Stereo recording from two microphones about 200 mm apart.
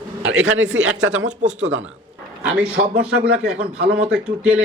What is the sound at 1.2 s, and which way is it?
Speech, 35° right (ahead or behind).